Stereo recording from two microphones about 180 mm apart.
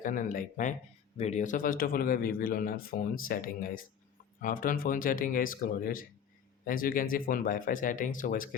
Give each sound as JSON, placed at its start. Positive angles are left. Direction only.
{"t": 0.0, "sound": "speech", "side_deg": 50}